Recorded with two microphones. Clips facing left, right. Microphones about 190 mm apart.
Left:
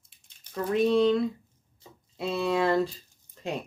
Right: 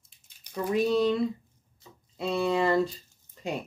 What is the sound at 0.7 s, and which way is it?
Speech, centre (ahead or behind).